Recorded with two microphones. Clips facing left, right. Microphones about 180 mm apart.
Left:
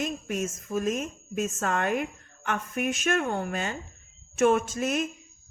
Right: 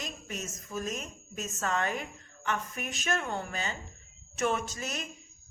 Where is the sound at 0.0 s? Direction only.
50° left (ahead or behind).